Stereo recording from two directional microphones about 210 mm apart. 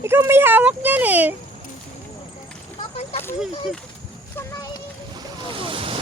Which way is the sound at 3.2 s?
10° left (ahead or behind).